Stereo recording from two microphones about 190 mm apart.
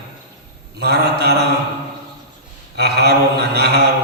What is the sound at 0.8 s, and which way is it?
Mantra, 55° right (ahead or behind).